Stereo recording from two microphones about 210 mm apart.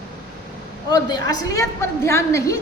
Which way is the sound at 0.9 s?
20° left (ahead or behind).